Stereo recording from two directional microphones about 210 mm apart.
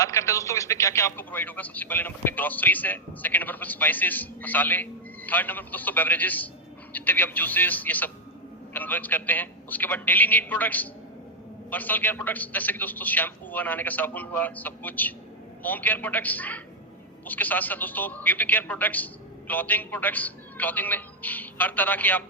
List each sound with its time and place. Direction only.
0.0 s a man's voice: 15° left (ahead or behind)